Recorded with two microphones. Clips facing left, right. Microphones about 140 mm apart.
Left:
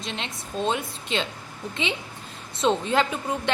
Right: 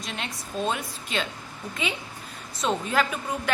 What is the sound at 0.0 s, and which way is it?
A woman's voice, 25° left (ahead or behind).